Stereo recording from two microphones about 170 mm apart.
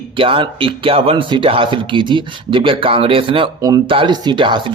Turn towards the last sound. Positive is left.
turn(degrees=-30)  # may be behind; listen again after turning